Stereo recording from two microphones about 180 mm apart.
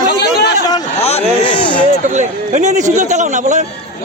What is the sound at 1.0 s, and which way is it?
Speech, 35° left (ahead or behind).